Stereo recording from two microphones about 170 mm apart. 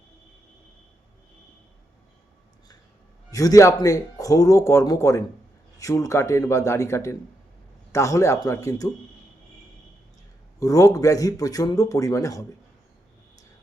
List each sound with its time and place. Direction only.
3.2 s a man's voice: 20° left (ahead or behind)
10.6 s speech: 20° left (ahead or behind)